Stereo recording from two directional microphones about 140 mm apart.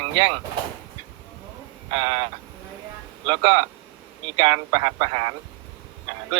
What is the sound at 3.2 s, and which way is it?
Speech, 35° right (ahead or behind).